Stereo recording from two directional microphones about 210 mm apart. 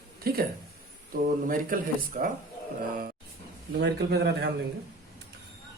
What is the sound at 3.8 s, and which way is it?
Speech, 50° right (ahead or behind).